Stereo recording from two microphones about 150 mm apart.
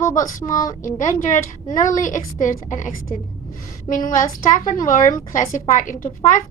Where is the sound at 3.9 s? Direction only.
60° left (ahead or behind).